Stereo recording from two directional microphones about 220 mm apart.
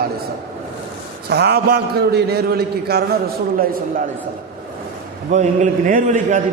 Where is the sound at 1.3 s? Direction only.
50° right (ahead or behind).